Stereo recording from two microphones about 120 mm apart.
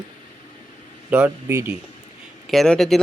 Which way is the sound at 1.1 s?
15° right (ahead or behind).